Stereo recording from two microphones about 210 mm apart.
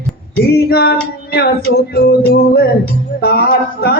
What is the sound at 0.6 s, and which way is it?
Female singing, 50° left (ahead or behind).